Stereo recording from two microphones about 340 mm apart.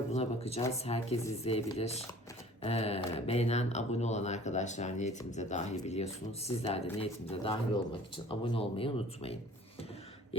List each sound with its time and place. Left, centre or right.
0.1 s speech: centre